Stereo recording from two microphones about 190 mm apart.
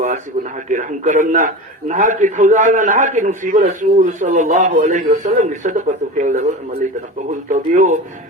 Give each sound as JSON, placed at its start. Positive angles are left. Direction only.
{"t": 0.0, "sound": "a man's voice", "side_deg": -40}
{"t": 7.5, "sound": "a man's voice", "side_deg": -40}